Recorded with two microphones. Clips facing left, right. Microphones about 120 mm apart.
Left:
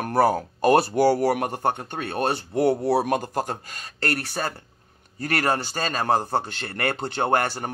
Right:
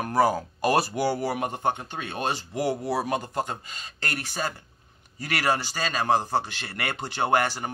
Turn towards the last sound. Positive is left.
turn(degrees=50)  # may be behind; listen again after turning